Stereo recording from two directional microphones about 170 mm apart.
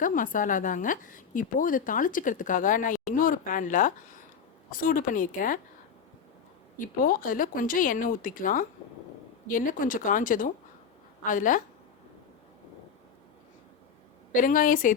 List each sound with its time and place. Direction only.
0.0 s a woman's voice: 55° left (ahead or behind)
6.7 s a woman's voice: 55° left (ahead or behind)
14.3 s a woman's voice: 55° left (ahead or behind)